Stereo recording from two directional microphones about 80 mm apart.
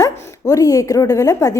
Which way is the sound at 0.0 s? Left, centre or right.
Left.